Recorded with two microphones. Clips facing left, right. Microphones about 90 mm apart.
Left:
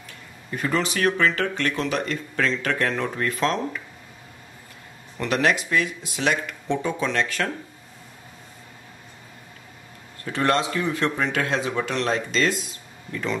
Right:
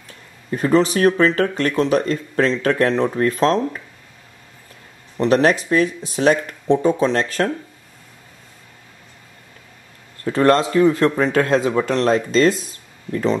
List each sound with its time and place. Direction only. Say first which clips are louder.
0.5 s speech: right 9 dB; 35° right (ahead or behind)
5.1 s speech: right 7 dB; 35° right (ahead or behind)
10.2 s speech: right 7 dB; 35° right (ahead or behind)